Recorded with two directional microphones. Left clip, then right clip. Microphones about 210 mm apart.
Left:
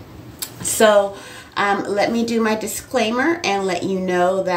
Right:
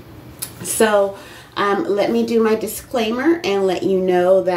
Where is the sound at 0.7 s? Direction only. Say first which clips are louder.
Left 1 dB; 15° left (ahead or behind).